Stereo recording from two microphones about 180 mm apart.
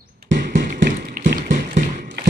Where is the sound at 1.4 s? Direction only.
45° right (ahead or behind).